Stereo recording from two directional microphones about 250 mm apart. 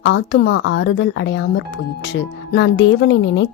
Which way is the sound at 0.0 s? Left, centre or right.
Left.